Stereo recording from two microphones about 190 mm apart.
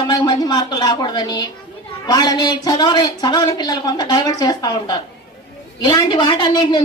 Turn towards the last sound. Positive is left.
turn(degrees=20)  # may be behind; listen again after turning